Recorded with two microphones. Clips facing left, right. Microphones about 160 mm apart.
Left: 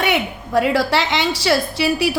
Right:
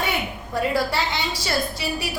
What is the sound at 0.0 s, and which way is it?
A woman's voice, 85° left.